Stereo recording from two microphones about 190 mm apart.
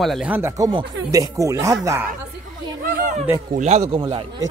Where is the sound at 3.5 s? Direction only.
35° right (ahead or behind).